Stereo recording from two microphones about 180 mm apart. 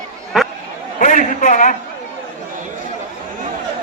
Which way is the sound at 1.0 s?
45° left (ahead or behind).